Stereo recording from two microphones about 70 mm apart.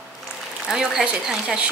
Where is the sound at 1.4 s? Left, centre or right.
Centre.